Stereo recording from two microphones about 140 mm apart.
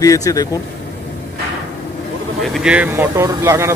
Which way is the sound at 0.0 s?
25° left (ahead or behind).